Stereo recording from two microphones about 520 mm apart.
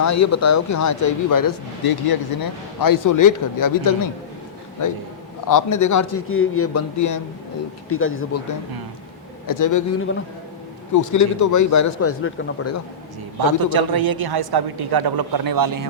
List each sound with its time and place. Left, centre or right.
0.0 s speech: left
9.5 s speech: left
10.9 s speech: left
13.4 s a man's voice: right